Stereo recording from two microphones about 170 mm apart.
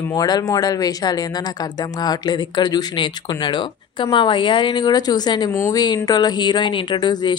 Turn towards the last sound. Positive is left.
turn(degrees=25)  # may be behind; listen again after turning